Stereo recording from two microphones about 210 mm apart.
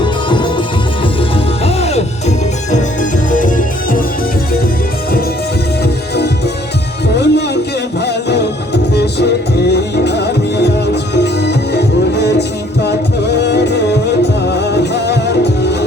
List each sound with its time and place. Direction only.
0.0 s music: 20° left (ahead or behind)
1.6 s music: 30° left (ahead or behind)
5.8 s music: 50° left (ahead or behind)
9.7 s music: 55° left (ahead or behind)
14.9 s music: 55° left (ahead or behind)